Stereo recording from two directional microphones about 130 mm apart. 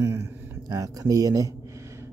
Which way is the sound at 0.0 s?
25° right (ahead or behind).